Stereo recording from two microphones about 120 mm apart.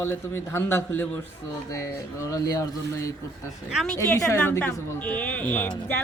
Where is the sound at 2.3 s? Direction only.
30° left (ahead or behind).